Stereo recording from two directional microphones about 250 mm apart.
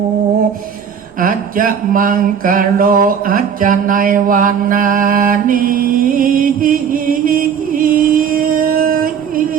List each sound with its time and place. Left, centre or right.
1.2 s mantra: right